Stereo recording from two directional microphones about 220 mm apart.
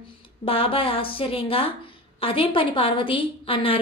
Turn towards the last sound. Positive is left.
turn(degrees=25)  # may be behind; listen again after turning